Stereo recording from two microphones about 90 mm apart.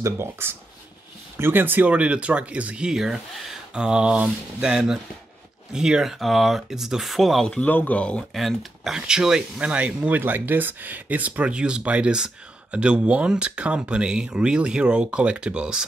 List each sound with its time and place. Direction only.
0.0 s speech: 25° right (ahead or behind); by 7.4 s centre (ahead or behind)
7.4 s speech: 15° left (ahead or behind); by 15.8 s 10° right (ahead or behind)